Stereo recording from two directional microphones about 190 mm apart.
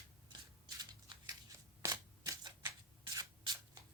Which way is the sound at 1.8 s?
15° right (ahead or behind).